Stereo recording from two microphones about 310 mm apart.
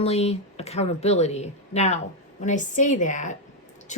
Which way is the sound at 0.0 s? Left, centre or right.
Centre.